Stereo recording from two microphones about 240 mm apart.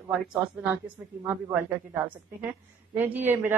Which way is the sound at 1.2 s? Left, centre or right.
Centre.